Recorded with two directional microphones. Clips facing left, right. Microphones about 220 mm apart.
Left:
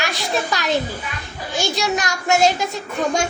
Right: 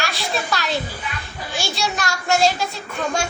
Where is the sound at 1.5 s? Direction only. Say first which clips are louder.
Left 4 dB; 20° left (ahead or behind).